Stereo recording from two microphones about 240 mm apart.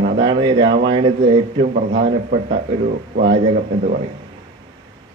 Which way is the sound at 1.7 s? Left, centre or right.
Right.